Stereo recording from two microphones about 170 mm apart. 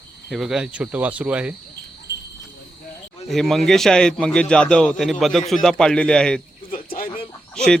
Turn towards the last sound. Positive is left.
turn(degrees=5)  # may be behind; listen again after turning